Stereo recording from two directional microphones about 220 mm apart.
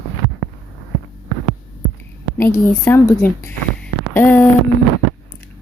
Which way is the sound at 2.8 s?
10° left (ahead or behind).